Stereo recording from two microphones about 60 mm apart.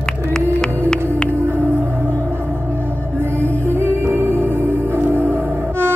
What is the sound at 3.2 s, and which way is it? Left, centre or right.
Music, right.